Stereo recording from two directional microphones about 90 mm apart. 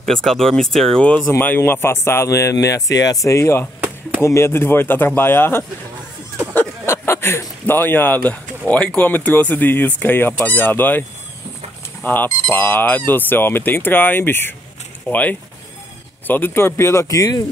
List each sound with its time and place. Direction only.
0.0 s speech: 5° left (ahead or behind)
1.4 s speech: 25° left (ahead or behind)
6.9 s speech: 30° left (ahead or behind)